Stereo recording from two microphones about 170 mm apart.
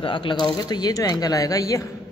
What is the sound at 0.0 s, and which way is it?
A man's voice, 30° left (ahead or behind).